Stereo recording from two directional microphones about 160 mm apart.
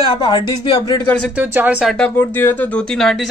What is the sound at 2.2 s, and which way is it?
Speech, 15° left (ahead or behind).